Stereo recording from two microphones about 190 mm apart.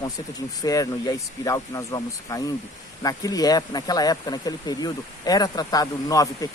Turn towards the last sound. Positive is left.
turn(degrees=20)  # may be behind; listen again after turning